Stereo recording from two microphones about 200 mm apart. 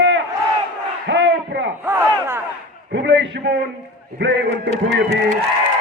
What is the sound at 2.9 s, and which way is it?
A man's voice, 60° right (ahead or behind).